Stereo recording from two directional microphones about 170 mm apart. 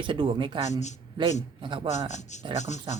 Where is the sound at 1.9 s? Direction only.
45° left (ahead or behind).